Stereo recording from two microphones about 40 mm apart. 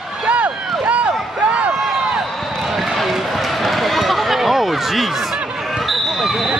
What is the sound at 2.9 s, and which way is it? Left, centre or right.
Run, centre.